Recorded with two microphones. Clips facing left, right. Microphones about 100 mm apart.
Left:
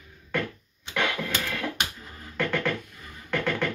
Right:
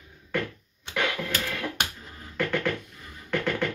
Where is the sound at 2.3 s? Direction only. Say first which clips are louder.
Even; 15° right (ahead or behind).